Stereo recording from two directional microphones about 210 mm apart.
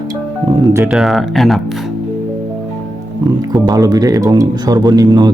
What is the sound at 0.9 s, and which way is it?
Speech, centre (ahead or behind).